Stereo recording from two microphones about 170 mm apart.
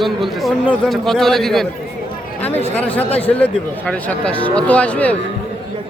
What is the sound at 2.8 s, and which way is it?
Speech, 10° left (ahead or behind).